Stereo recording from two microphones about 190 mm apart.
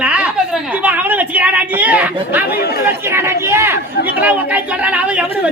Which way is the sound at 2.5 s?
55° left (ahead or behind).